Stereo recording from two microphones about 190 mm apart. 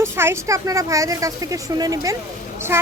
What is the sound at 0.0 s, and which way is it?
A woman's voice, 15° right (ahead or behind).